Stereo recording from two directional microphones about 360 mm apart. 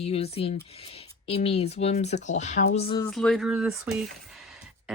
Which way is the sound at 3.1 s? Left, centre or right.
Centre.